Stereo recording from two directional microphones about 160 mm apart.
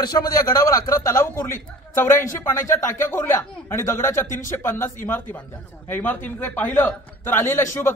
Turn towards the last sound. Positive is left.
turn(degrees=15)  # may be behind; listen again after turning